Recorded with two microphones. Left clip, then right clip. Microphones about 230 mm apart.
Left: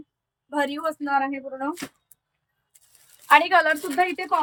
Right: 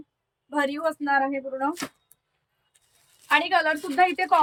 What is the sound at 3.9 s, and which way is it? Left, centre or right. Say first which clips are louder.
Speech: right 2 dB; centre.